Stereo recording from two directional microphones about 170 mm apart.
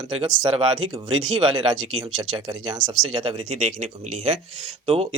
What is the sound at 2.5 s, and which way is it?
Speech, 20° right (ahead or behind).